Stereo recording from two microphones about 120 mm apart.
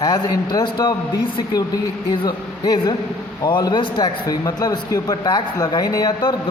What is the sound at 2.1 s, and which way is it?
Speech, 40° left (ahead or behind).